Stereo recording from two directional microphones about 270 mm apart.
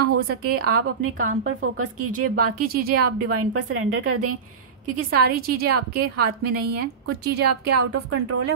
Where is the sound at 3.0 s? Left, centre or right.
Right.